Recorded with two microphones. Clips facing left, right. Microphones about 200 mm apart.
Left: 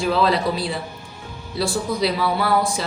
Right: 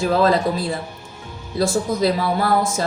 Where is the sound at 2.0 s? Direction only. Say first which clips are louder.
Right 1 dB; 45° right (ahead or behind).